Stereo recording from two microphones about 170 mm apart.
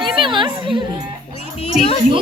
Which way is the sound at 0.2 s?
30° right (ahead or behind).